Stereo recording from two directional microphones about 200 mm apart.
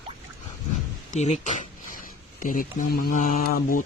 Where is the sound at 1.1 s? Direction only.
35° left (ahead or behind).